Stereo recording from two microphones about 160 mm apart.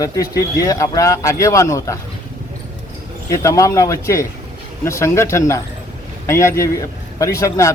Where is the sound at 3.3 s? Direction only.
20° left (ahead or behind).